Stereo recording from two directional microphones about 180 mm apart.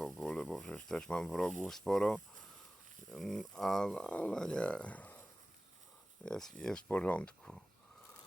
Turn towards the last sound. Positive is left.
turn(degrees=5)  # may be behind; listen again after turning